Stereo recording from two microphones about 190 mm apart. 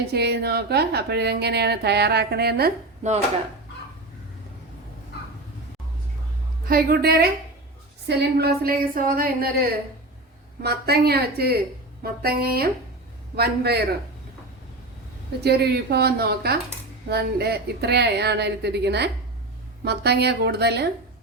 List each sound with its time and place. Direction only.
0.1 s a woman's voice: 60° right (ahead or behind)
6.7 s a woman's voice: 55° right (ahead or behind)
15.4 s a woman's voice: 55° right (ahead or behind)